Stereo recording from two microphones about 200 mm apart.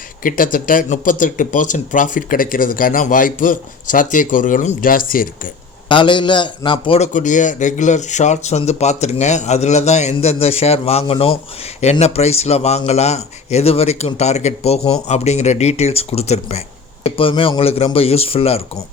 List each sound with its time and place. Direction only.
0.2 s a man's voice: 45° left (ahead or behind)
5.9 s a man's voice: 25° left (ahead or behind)